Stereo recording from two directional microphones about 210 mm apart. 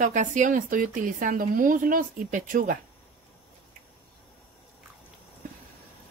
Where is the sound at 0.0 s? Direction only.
35° right (ahead or behind).